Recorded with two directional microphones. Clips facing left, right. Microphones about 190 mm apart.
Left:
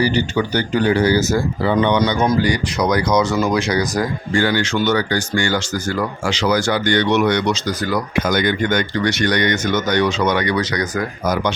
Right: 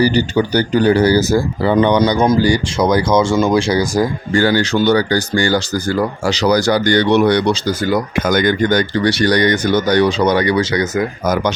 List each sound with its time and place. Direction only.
0.0 s speech: 35° right (ahead or behind)
8.1 s speech: 45° right (ahead or behind); by 11.0 s 25° right (ahead or behind)